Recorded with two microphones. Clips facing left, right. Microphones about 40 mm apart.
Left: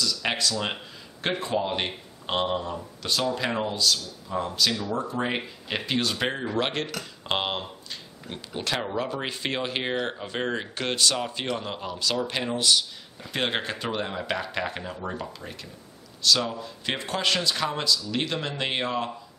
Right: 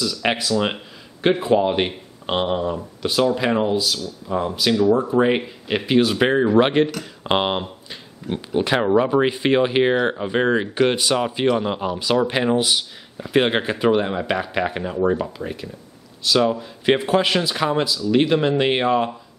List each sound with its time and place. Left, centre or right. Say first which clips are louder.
0.0 s speech: right 5 dB; centre